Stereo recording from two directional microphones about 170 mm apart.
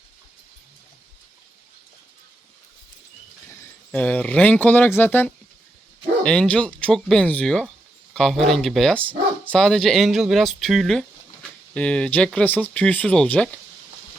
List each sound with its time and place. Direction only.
3.9 s speech: 10° left (ahead or behind)